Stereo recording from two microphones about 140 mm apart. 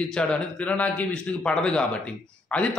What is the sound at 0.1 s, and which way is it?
Speech, 5° left (ahead or behind).